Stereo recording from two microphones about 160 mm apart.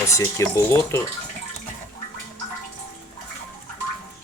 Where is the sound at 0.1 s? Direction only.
20° left (ahead or behind).